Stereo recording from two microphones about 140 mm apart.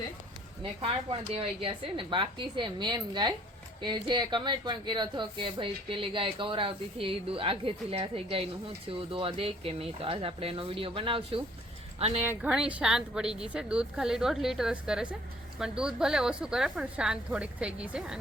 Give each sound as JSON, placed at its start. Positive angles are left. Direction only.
{"t": 1.3, "sound": "speech", "side_deg": -40}
{"t": 12.2, "sound": "a woman's voice", "side_deg": -10}